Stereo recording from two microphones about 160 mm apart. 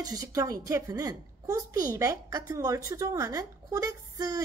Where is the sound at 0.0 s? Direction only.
25° right (ahead or behind).